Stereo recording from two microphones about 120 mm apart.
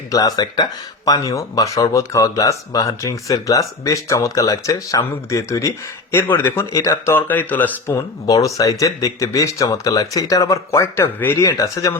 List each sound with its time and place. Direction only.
0.1 s speech: 30° left (ahead or behind); by 7.9 s 15° left (ahead or behind)
7.9 s speech: 25° left (ahead or behind)